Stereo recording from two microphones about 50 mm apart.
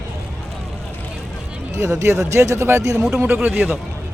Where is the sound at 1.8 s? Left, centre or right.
Right.